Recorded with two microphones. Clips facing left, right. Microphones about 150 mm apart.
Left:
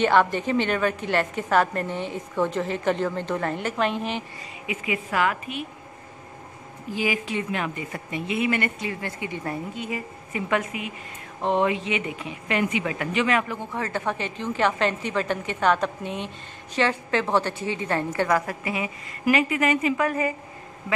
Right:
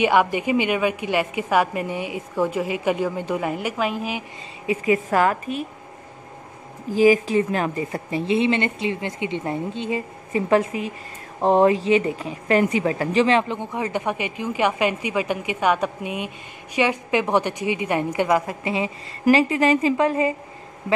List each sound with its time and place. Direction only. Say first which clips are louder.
0.0 s a woman's voice: right 1 dB; 10° right (ahead or behind)
4.6 s a woman's voice: right 8 dB; 40° right (ahead or behind)
6.9 s a woman's voice: right 10 dB; 40° right (ahead or behind)